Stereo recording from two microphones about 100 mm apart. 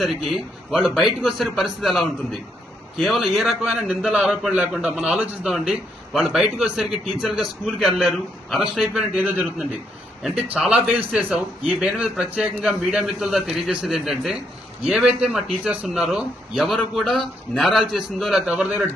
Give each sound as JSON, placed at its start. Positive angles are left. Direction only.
{"t": 0.0, "sound": "a man's voice", "side_deg": 0}
{"t": 9.1, "sound": "a man's voice", "side_deg": -15}
{"t": 10.2, "sound": "a man's voice", "side_deg": -5}